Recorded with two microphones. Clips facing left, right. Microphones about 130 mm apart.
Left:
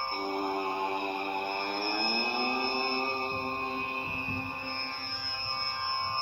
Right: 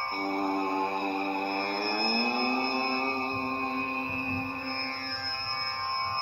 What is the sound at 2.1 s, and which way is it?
Vehicle, 55° right (ahead or behind).